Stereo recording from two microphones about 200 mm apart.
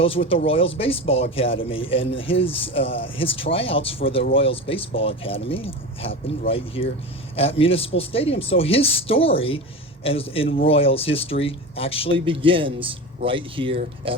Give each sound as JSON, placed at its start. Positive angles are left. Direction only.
{"t": 0.0, "sound": "a man's voice", "side_deg": 30}
{"t": 12.1, "sound": "speech", "side_deg": -25}